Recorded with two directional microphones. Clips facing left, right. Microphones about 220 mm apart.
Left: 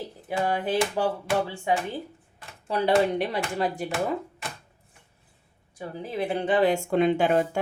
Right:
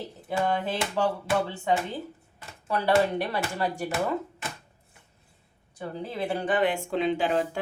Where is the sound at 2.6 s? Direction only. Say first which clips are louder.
Left 1 dB; 20° left (ahead or behind).